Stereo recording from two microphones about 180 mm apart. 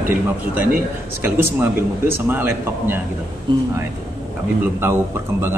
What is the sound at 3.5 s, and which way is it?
Speech, 25° right (ahead or behind).